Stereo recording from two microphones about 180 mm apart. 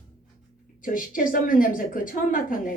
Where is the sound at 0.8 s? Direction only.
50° left (ahead or behind).